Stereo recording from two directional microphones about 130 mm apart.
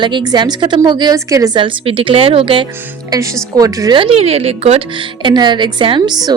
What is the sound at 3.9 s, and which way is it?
Speech, 45° right (ahead or behind).